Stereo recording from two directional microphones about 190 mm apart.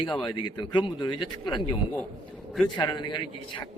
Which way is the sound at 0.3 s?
25° left (ahead or behind).